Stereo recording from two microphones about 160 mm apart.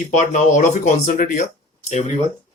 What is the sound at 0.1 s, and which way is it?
Speech, 50° left (ahead or behind).